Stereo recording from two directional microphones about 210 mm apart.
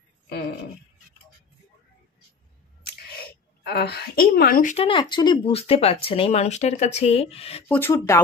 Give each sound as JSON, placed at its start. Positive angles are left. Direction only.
{"t": 3.6, "sound": "a woman's voice", "side_deg": 50}
{"t": 4.7, "sound": "speech", "side_deg": 25}
{"t": 7.6, "sound": "speech", "side_deg": 10}